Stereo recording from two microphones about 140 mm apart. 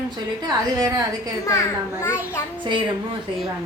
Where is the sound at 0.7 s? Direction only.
25° right (ahead or behind).